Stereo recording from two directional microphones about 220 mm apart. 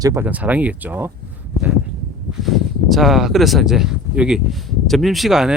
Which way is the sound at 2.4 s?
Centre (ahead or behind).